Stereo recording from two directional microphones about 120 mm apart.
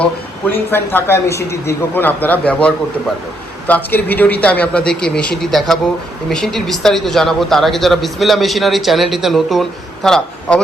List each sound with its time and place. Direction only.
0.0 s a man's voice: 15° left (ahead or behind)